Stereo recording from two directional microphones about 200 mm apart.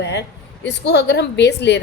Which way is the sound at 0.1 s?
60° left (ahead or behind).